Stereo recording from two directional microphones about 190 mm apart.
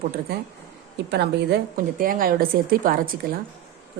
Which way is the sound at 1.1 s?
60° right (ahead or behind).